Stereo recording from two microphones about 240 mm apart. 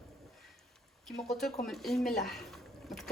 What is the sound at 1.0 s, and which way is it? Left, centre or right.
Speech, centre.